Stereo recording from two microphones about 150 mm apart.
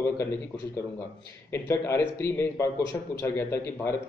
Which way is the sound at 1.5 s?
15° left (ahead or behind).